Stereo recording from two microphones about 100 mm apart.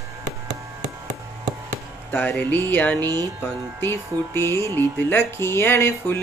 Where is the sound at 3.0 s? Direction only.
40° right (ahead or behind).